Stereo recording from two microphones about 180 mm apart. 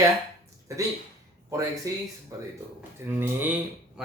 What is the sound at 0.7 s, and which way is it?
Speech, 15° right (ahead or behind).